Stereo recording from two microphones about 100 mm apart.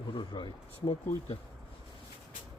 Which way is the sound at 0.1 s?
60° left (ahead or behind).